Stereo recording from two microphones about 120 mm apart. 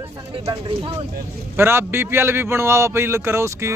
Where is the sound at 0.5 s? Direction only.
40° right (ahead or behind).